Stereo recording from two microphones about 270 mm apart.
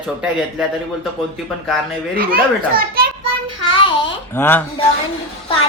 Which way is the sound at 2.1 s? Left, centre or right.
Right.